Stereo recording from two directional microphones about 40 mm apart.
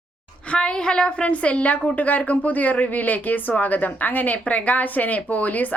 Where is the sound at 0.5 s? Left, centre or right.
Left.